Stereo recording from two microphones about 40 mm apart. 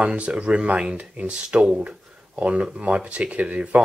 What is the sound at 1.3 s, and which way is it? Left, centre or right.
Speech, right.